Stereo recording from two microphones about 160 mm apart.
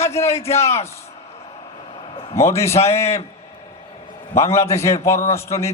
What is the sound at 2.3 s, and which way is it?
Speech, 15° left (ahead or behind).